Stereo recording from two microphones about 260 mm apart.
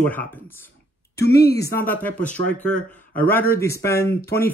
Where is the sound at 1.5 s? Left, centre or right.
Centre.